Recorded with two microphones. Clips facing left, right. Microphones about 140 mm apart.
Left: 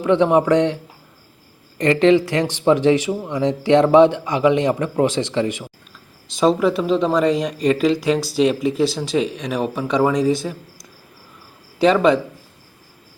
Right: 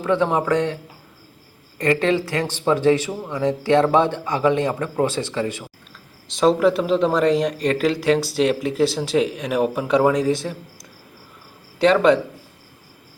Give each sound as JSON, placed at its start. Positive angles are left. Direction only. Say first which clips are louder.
{"t": 0.0, "sound": "a man's voice", "louder": "left 4 dB", "side_deg": 20}
{"t": 1.8, "sound": "speech", "louder": "left 5 dB", "side_deg": 20}
{"t": 6.2, "sound": "speech", "louder": "even", "side_deg": 0}
{"t": 11.8, "sound": "speech", "louder": "left 1 dB", "side_deg": 0}